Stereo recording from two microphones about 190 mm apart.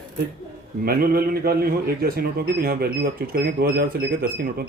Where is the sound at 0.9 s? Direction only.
50° right (ahead or behind).